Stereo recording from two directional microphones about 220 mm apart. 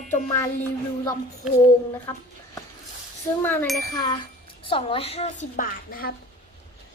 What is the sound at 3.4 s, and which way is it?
A woman's voice, 10° left (ahead or behind).